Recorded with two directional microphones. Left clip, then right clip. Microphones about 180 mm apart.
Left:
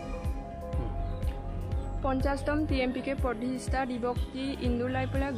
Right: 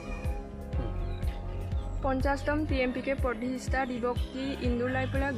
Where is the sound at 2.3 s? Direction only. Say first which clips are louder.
Even; 45° left (ahead or behind).